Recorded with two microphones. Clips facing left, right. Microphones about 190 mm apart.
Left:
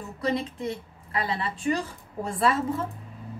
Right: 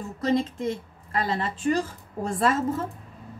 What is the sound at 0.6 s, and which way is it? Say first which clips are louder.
A woman's voice: right 3 dB; 45° right (ahead or behind).